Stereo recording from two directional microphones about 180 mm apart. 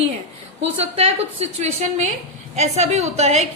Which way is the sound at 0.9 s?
35° right (ahead or behind).